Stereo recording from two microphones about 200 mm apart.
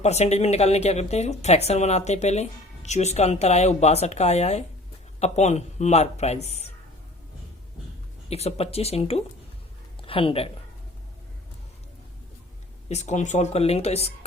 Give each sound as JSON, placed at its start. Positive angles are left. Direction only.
{"t": 0.0, "sound": "speech", "side_deg": 35}
{"t": 8.3, "sound": "speech", "side_deg": 30}
{"t": 12.9, "sound": "speech", "side_deg": 35}